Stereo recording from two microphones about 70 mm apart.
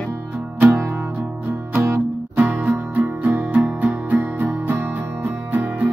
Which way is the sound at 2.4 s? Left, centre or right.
Centre.